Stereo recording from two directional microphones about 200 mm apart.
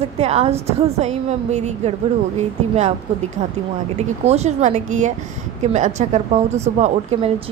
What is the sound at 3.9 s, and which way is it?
Speech, 35° right (ahead or behind).